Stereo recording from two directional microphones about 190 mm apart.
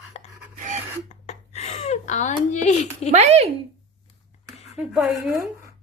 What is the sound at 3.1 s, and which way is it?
Speech, 35° right (ahead or behind).